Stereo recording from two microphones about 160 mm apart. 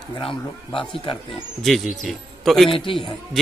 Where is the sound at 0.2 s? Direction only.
30° left (ahead or behind).